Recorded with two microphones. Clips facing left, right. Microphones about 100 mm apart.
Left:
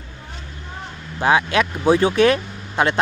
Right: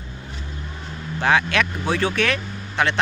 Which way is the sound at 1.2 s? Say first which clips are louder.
Left 2 dB; 15° left (ahead or behind).